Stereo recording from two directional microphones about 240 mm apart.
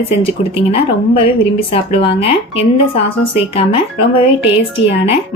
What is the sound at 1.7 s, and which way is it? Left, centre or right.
A woman's voice, left.